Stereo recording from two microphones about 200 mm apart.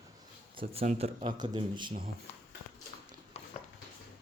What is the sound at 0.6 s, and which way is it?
Speech, 30° right (ahead or behind).